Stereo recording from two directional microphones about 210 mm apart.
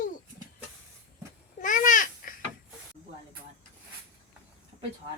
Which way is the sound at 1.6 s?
40° left (ahead or behind).